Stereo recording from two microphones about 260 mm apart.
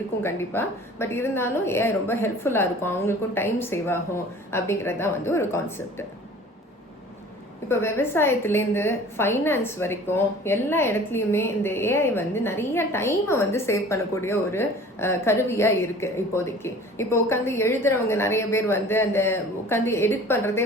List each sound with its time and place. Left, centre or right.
0.2 s a woman's voice: centre
7.7 s a woman's voice: centre